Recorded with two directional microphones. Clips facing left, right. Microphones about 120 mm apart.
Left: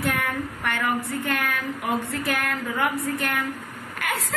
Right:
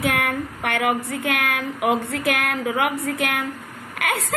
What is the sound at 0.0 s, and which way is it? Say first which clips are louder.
A woman's voice: right 3 dB; 65° right (ahead or behind).